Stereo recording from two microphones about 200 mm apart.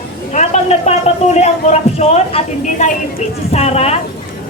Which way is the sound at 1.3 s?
30° left (ahead or behind).